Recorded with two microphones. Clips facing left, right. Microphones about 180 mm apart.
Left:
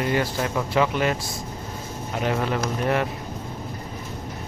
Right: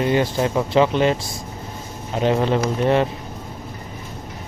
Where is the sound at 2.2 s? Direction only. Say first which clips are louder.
Right 6 dB; 25° right (ahead or behind).